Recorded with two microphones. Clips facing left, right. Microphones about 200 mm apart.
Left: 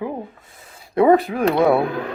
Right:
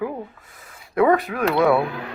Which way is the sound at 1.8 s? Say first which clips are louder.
Left 4 dB; 50° left (ahead or behind).